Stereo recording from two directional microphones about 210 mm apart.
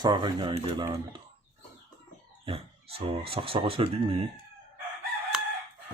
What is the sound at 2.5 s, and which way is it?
Speech, 25° right (ahead or behind).